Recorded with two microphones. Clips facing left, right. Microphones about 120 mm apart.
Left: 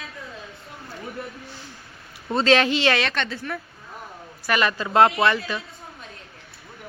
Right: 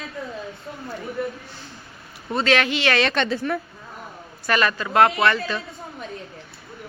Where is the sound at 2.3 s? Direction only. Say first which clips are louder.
Left 2 dB; 30° left (ahead or behind).